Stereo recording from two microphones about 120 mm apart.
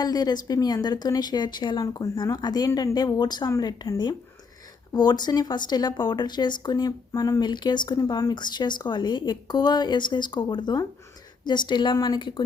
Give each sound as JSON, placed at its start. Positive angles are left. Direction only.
{"t": 0.0, "sound": "speech", "side_deg": 35}